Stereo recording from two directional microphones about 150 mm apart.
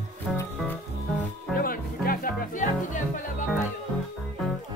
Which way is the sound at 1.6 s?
75° left (ahead or behind).